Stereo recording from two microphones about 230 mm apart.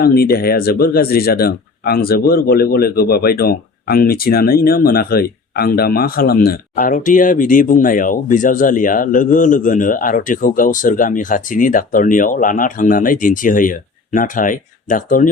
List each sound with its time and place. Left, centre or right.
0.0 s speech: left